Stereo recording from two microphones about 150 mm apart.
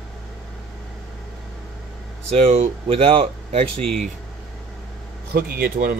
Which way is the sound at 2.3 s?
45° right (ahead or behind).